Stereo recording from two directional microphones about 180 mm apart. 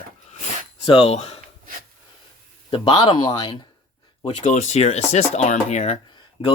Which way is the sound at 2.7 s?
30° left (ahead or behind).